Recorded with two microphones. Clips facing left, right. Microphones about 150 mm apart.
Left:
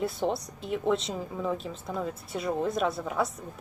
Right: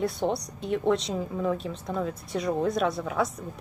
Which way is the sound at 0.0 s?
Centre (ahead or behind).